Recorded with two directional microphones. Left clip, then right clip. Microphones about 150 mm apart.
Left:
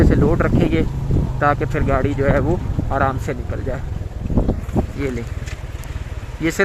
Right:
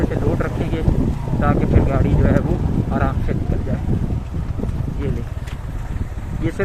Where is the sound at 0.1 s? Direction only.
70° left (ahead or behind).